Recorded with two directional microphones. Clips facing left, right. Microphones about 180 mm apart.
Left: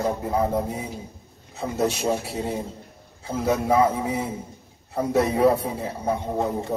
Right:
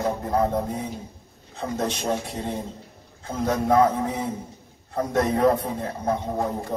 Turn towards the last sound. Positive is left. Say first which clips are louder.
# left 1 dB
turn(degrees=20)  # may be behind; listen again after turning